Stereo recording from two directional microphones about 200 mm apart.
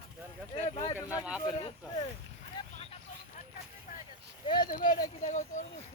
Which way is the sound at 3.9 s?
45° left (ahead or behind).